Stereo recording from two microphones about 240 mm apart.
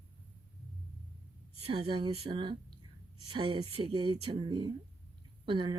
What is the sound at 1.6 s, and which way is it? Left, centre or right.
Speech, right.